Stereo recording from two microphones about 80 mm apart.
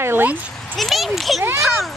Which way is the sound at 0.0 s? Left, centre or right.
Right.